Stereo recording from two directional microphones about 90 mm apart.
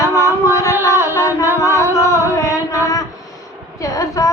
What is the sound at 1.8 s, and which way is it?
Music, 35° left (ahead or behind).